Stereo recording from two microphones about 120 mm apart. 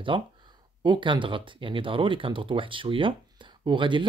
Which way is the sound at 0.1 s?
45° right (ahead or behind).